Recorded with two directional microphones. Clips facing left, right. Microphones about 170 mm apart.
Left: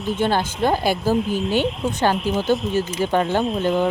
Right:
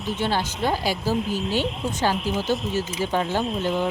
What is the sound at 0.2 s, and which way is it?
Speech, 50° left (ahead or behind).